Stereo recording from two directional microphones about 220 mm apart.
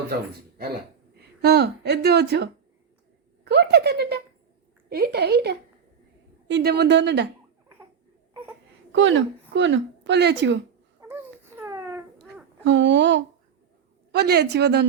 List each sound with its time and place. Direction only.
1.2 s speech: 45° right (ahead or behind)
8.9 s a woman's voice: 60° right (ahead or behind)
11.1 s baby cry: 10° right (ahead or behind)
12.6 s speech: 55° right (ahead or behind)